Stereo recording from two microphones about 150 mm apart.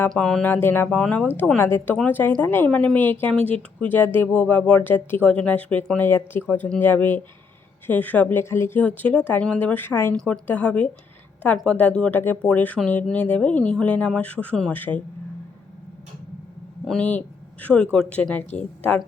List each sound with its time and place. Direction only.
0.1 s a woman's voice: 5° left (ahead or behind)
16.8 s a woman's voice: 5° left (ahead or behind)